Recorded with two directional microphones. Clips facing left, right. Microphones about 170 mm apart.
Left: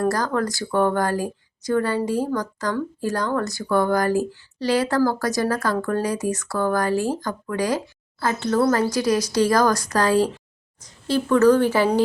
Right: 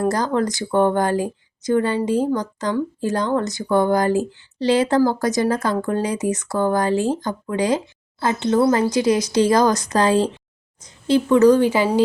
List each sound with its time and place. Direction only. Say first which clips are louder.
0.0 s a woman's voice: right 2 dB; 20° right (ahead or behind)